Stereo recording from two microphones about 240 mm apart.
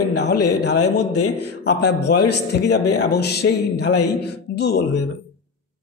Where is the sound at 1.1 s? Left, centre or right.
Left.